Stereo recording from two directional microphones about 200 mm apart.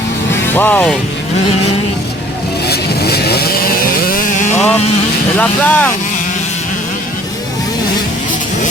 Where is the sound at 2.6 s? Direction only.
50° left (ahead or behind).